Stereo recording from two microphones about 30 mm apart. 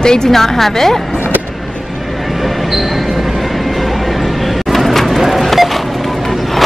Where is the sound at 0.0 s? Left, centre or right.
Left.